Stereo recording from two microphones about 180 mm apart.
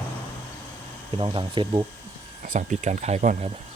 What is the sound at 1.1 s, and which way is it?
Speech, 25° right (ahead or behind).